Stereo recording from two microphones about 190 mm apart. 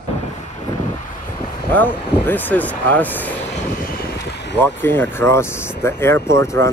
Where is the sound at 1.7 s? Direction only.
10° left (ahead or behind).